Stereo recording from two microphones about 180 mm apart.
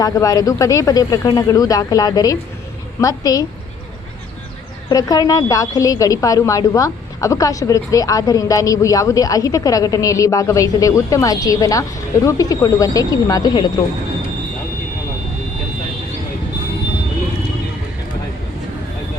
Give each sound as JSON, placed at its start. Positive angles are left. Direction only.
{"t": 0.0, "sound": "a woman's voice", "side_deg": 20}
{"t": 4.9, "sound": "a woman's voice", "side_deg": 20}